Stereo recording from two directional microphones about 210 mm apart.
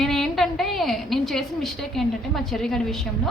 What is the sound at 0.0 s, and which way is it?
A woman's voice, centre (ahead or behind).